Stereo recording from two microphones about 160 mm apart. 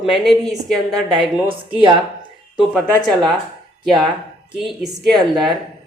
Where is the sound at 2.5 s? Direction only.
Centre (ahead or behind).